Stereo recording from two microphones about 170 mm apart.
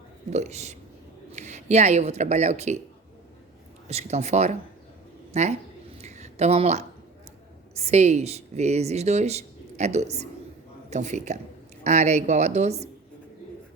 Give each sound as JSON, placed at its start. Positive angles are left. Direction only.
{"t": 0.3, "sound": "speech", "side_deg": -40}
{"t": 3.8, "sound": "speech", "side_deg": -40}
{"t": 6.0, "sound": "a sound", "side_deg": -40}
{"t": 7.8, "sound": "a woman's voice", "side_deg": -40}